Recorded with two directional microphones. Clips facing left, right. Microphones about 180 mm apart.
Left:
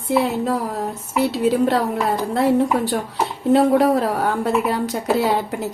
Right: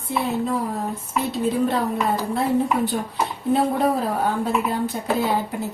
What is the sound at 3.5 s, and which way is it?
A woman's voice, 80° left.